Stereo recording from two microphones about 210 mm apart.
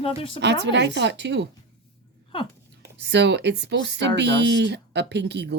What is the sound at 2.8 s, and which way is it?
Speech, 55° right (ahead or behind).